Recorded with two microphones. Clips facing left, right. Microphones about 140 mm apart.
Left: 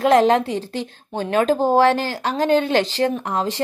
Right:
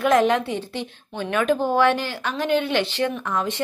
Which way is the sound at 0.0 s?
35° left (ahead or behind).